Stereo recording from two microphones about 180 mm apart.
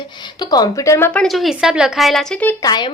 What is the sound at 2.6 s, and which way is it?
Speech, 25° left (ahead or behind).